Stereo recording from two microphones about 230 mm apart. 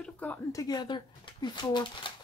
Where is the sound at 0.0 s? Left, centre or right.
Centre.